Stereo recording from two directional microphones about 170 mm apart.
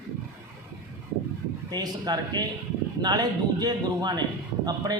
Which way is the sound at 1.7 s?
25° right (ahead or behind).